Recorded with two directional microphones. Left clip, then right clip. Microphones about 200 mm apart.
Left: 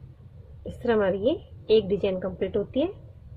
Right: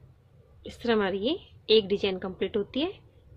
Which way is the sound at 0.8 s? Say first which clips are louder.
Left 3 dB; 45° right (ahead or behind).